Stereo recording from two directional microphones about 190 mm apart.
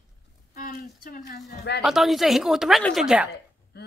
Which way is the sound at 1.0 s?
50° left (ahead or behind).